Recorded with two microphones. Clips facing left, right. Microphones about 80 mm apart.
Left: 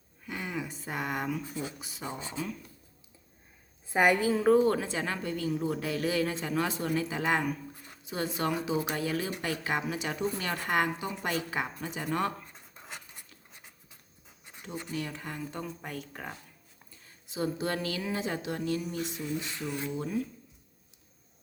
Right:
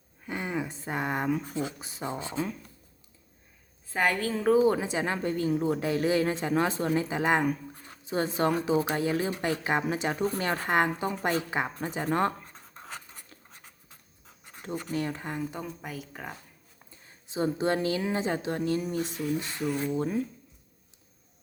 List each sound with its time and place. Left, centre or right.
0.3 s a sound: right
1.6 s speech: right
3.8 s a woman's voice: centre
4.6 s a woman's voice: centre; by 12.3 s right
12.7 s writing: right
14.5 s pant: right
14.8 s a woman's voice: right
15.5 s speech: centre
17.2 s speech: right
20.0 s speech: right